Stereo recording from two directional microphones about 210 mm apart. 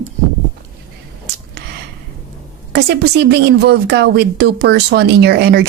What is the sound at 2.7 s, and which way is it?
A woman's voice, 50° right (ahead or behind).